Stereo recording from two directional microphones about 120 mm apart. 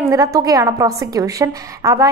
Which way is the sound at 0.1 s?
30° right (ahead or behind).